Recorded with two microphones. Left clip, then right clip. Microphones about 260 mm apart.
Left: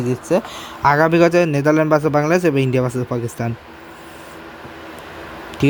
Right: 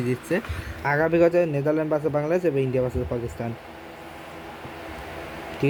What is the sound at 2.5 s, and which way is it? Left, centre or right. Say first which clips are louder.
Speech: left 5 dB; left.